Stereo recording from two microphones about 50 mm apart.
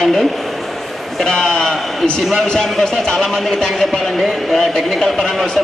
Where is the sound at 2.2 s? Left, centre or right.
Centre.